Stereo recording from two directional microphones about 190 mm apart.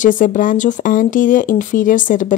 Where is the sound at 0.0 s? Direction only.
45° left (ahead or behind).